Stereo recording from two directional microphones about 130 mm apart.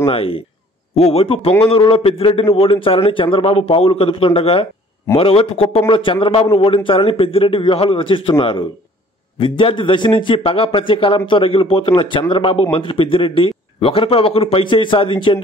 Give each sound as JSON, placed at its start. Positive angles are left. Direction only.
{"t": 0.1, "sound": "a man's voice", "side_deg": 45}